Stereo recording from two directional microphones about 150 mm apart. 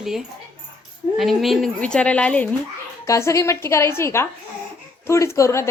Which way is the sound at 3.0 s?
20° left (ahead or behind).